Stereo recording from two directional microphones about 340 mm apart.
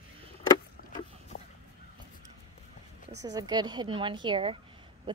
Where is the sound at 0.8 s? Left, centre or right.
Left.